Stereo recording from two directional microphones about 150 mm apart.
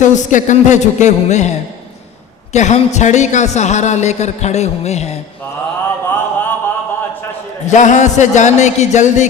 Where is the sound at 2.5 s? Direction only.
50° left (ahead or behind).